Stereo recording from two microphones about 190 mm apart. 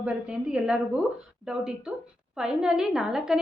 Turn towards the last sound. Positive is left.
turn(degrees=-5)  # may be behind; listen again after turning